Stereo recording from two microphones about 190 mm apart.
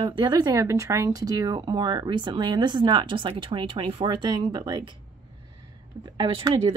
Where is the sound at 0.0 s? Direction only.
20° right (ahead or behind).